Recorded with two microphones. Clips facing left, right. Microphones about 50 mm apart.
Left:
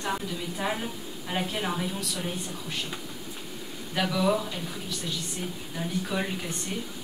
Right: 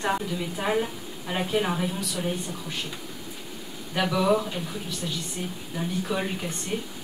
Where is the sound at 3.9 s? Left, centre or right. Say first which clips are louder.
Right 3 dB; centre.